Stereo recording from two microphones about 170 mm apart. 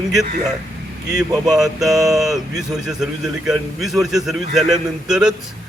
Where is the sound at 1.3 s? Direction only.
20° right (ahead or behind).